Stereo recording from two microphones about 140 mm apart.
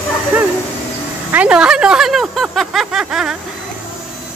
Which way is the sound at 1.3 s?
10° right (ahead or behind).